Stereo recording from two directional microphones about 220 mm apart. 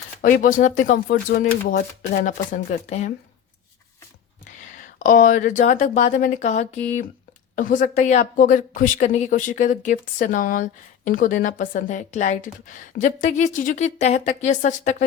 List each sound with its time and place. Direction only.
0.2 s a woman's voice: 40° left (ahead or behind)
4.4 s a woman's voice: 35° left (ahead or behind)